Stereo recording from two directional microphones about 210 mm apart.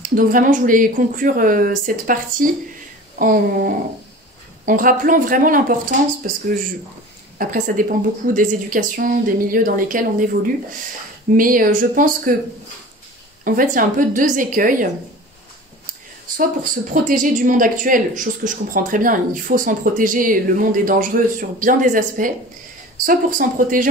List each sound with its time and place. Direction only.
0.1 s speech: 40° right (ahead or behind)
13.4 s speech: 40° right (ahead or behind)
16.9 s speech: 40° right (ahead or behind)